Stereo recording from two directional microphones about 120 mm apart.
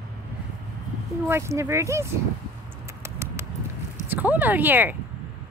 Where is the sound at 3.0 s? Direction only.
20° right (ahead or behind).